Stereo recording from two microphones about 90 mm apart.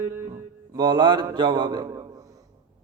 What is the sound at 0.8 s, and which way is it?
A man's voice, 55° right (ahead or behind).